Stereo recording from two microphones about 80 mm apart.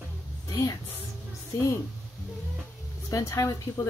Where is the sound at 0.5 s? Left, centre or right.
Left.